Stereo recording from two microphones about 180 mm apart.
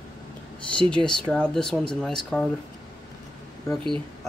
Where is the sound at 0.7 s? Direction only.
5° left (ahead or behind).